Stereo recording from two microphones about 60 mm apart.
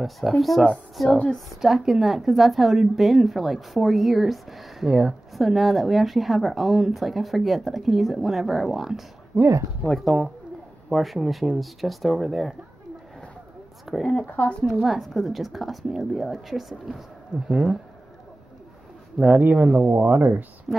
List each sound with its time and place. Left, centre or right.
0.0 s a woman's voice: centre
1.1 s a woman's voice: centre
1.6 s a woman's voice: centre
9.3 s speech: right
9.8 s a woman's voice: centre
13.9 s a woman's voice: centre
14.2 s speech: left
14.6 s a woman's voice: centre
17.5 s speech: centre
19.2 s speech: right